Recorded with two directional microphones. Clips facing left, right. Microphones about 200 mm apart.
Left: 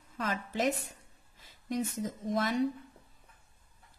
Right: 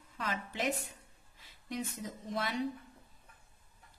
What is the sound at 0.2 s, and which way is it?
A woman's voice, 45° left (ahead or behind).